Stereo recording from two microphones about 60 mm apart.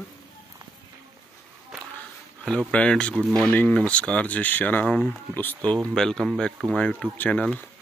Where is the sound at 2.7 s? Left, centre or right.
Centre; by 5.6 s left.